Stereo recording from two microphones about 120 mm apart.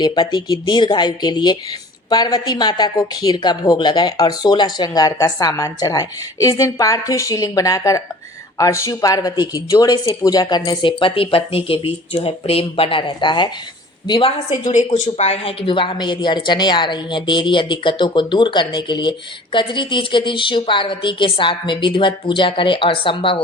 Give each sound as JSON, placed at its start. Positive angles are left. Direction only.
{"t": 0.0, "sound": "speech", "side_deg": 40}
{"t": 11.0, "sound": "a woman's voice", "side_deg": 50}
{"t": 14.1, "sound": "a woman's voice", "side_deg": 50}
{"t": 14.6, "sound": "speech", "side_deg": 85}
{"t": 15.6, "sound": "a woman's voice", "side_deg": 45}